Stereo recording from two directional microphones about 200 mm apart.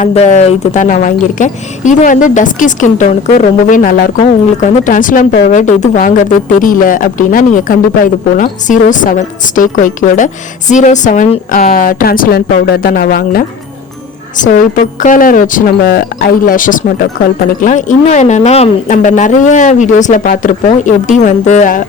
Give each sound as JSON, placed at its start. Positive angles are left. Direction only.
{"t": 0.0, "sound": "a woman's voice", "side_deg": 35}
{"t": 15.0, "sound": "a woman's voice", "side_deg": 45}